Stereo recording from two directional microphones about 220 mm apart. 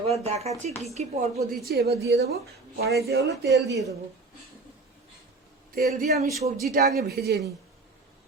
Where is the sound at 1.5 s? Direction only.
45° right (ahead or behind).